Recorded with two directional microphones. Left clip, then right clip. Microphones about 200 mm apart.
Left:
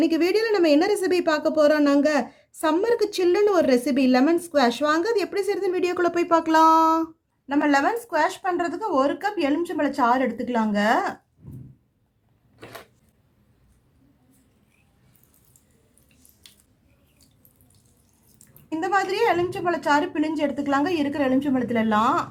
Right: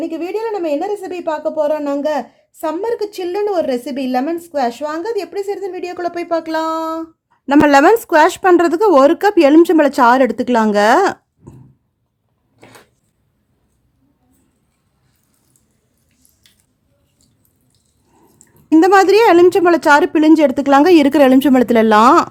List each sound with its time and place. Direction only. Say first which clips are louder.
0.0 s a woman's voice: even; centre (ahead or behind)
7.4 s speech: right 12 dB; 55° right (ahead or behind)
18.8 s speech: right 13 dB; 55° right (ahead or behind)